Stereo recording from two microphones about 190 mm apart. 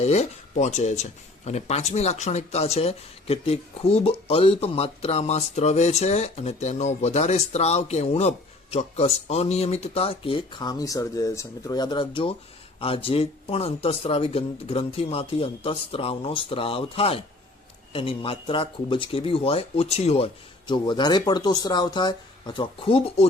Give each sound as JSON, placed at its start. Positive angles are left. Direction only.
{"t": 0.0, "sound": "speech", "side_deg": 35}